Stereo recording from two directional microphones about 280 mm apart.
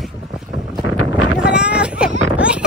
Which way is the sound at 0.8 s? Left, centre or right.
Centre.